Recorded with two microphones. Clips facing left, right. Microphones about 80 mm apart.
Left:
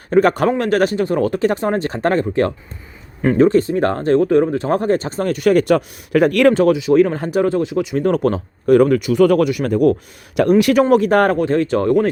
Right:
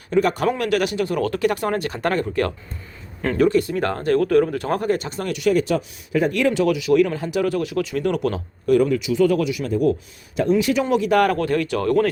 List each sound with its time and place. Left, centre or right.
0.1 s speech: left
0.4 s speech: left
6.5 s speech: left
7.9 s speech: left
10.8 s speech: left
11.3 s speech: left